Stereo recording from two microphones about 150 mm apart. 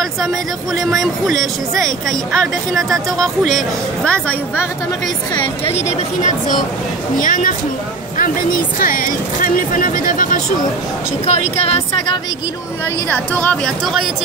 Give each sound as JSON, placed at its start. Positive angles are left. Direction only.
{"t": 0.7, "sound": "speech", "side_deg": 0}
{"t": 5.3, "sound": "a woman's voice", "side_deg": 35}
{"t": 5.8, "sound": "speech", "side_deg": 50}
{"t": 7.2, "sound": "speech", "side_deg": 65}
{"t": 11.2, "sound": "speech", "side_deg": 45}
{"t": 13.3, "sound": "speech", "side_deg": 10}